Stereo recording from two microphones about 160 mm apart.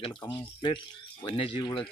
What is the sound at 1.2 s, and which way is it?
Speech, 35° left (ahead or behind).